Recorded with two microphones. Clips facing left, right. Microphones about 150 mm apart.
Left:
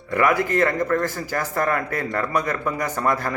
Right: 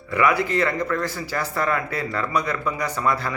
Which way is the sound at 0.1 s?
50° left (ahead or behind).